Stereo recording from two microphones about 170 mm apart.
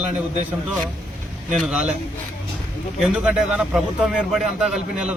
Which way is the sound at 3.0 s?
5° right (ahead or behind).